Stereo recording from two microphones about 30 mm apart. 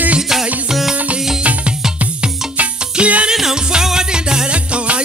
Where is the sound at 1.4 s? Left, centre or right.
Right.